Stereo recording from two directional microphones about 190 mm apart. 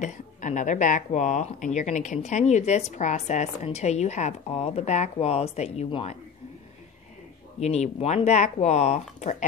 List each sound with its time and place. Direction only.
0.0 s speech: 40° left (ahead or behind)
7.6 s speech: 35° left (ahead or behind)